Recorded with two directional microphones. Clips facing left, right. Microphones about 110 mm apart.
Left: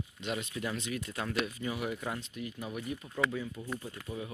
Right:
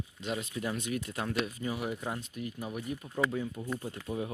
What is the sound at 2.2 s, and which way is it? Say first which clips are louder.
Speech: right 2 dB; 40° right (ahead or behind).